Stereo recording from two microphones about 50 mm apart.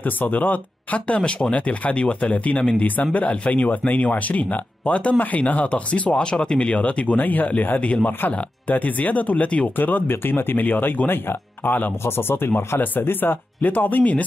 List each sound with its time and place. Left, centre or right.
0.0 s speech: left
9.8 s speech: left
12.0 s speech: left